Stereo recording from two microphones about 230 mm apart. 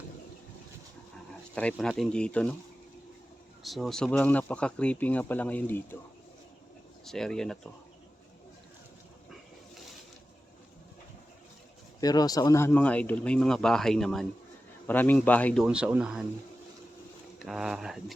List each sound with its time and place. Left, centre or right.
1.5 s speech: centre
3.6 s speech: centre
7.0 s speech: centre
11.9 s speech: centre
15.6 s speech: centre
17.4 s speech: centre